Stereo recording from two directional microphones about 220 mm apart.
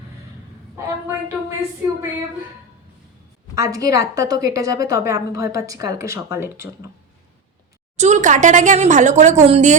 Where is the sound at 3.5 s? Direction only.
15° right (ahead or behind).